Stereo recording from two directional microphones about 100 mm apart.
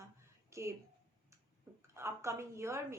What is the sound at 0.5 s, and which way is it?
Speech, 30° right (ahead or behind).